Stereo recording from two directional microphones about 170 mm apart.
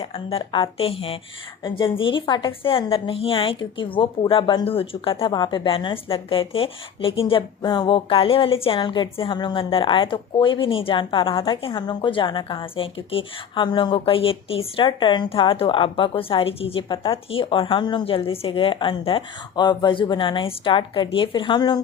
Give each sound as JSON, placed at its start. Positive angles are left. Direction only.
{"t": 0.1, "sound": "a woman's voice", "side_deg": 35}